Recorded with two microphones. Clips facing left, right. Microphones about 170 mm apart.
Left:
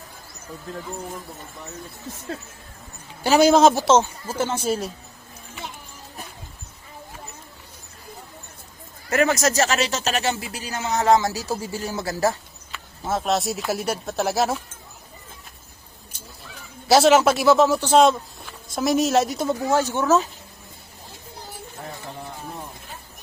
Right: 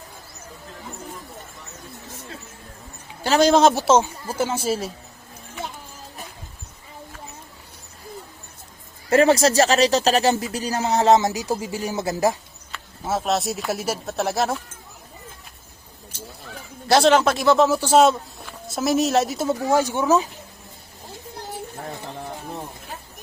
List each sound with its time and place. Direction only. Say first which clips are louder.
3.2 s speech: left 1 dB; 10° left (ahead or behind); by 4.9 s 5° right (ahead or behind)
9.0 s speech: right 4 dB; 30° right (ahead or behind)
12.7 s speech: even; 5° right (ahead or behind)
16.9 s speech: left 1 dB; 5° left (ahead or behind); by 20.2 s 10° right (ahead or behind)